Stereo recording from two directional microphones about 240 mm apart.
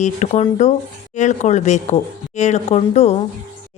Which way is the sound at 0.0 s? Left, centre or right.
Left.